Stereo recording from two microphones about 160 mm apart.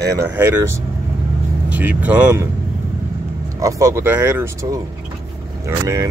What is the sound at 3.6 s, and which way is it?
Speech, 20° right (ahead or behind).